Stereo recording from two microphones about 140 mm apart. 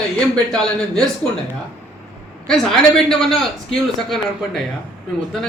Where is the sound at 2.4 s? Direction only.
5° left (ahead or behind).